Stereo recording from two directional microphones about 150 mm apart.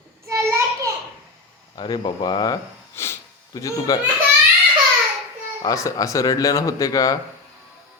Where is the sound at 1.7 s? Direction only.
30° left (ahead or behind).